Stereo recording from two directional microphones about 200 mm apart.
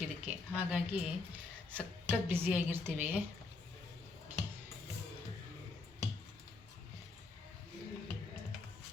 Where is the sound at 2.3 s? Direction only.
10° right (ahead or behind).